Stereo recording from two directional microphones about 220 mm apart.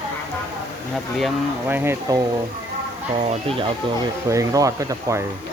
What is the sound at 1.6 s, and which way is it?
Speech, 10° right (ahead or behind).